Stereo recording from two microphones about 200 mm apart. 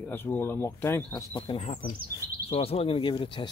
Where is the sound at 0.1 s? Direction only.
10° left (ahead or behind).